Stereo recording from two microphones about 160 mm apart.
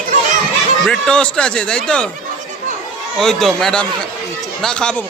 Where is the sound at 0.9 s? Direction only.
5° left (ahead or behind).